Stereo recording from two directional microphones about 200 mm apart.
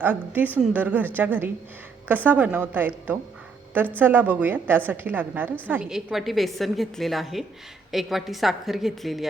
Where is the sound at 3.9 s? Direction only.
10° right (ahead or behind).